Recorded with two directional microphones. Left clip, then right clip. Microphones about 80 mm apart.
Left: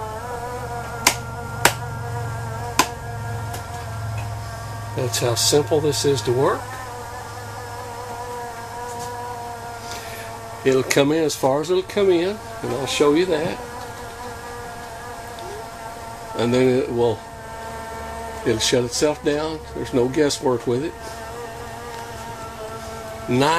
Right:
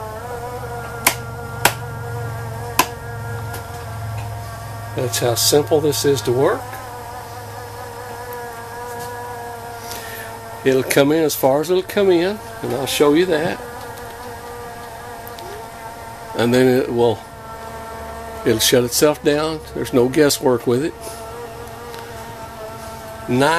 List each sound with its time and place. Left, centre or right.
4.9 s speech: right
10.6 s speech: right
16.3 s speech: right
18.4 s speech: right
23.2 s a man's voice: centre